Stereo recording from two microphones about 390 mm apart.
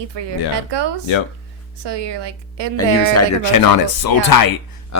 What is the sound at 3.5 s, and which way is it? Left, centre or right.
Speech, left.